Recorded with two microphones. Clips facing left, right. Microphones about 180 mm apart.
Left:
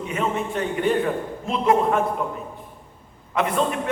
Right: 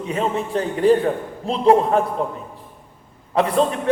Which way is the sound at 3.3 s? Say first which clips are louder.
Right 4 dB; 35° right (ahead or behind).